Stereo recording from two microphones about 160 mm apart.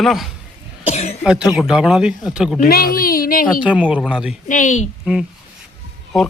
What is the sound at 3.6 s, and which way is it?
Speech, 10° right (ahead or behind).